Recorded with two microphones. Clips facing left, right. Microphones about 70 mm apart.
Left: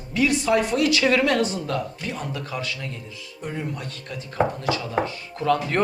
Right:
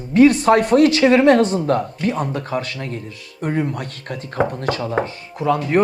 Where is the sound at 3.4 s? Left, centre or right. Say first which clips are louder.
Right 9 dB; right.